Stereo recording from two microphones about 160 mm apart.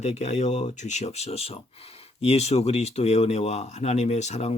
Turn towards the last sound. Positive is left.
turn(degrees=45)  # may be behind; listen again after turning